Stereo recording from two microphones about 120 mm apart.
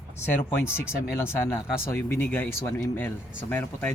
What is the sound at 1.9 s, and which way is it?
Speech, 20° left (ahead or behind).